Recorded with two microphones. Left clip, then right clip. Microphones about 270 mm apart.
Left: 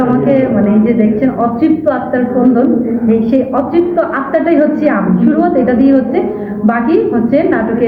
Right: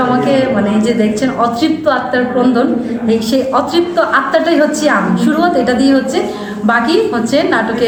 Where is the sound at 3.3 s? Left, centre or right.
Centre.